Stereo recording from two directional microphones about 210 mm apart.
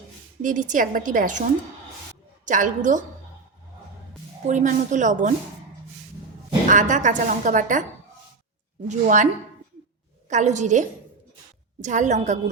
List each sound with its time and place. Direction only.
0.4 s a woman's voice: 35° right (ahead or behind)
4.4 s a woman's voice: 35° right (ahead or behind)
6.7 s a woman's voice: 35° right (ahead or behind)
8.9 s a woman's voice: 35° right (ahead or behind)